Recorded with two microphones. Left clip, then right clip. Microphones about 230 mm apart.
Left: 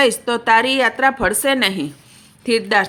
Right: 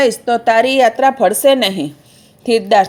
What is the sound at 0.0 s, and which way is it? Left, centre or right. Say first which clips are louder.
Speech: right 3 dB; centre.